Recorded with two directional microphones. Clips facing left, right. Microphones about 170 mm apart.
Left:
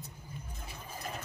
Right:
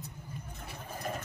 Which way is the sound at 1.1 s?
50° right (ahead or behind).